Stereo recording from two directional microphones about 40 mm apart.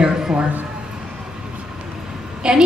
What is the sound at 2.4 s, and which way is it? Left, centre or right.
Speech, right.